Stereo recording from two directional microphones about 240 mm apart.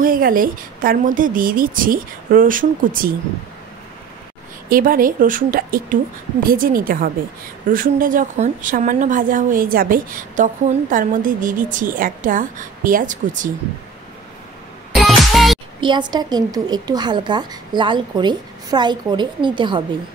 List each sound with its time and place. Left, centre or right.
0.0 s a woman's voice: right
4.6 s a woman's voice: right
15.0 s music: centre
15.8 s a woman's voice: centre